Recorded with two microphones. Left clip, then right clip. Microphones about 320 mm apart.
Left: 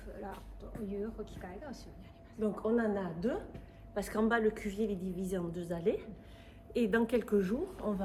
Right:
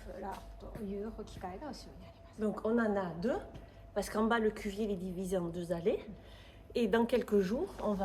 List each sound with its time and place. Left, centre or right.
0.2 s music: right
1.2 s a woman's voice: centre
2.4 s a woman's voice: right